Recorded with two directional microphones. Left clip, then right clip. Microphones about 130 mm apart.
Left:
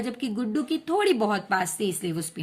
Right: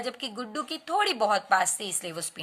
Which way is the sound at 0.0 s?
25° right (ahead or behind).